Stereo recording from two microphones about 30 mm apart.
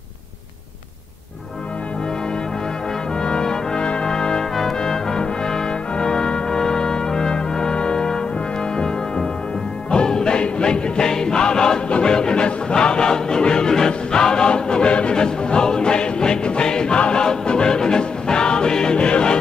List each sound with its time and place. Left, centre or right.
3.2 s brass instrument: left
4.1 s trombone: left
4.6 s brass instrument: centre
9.8 s music: left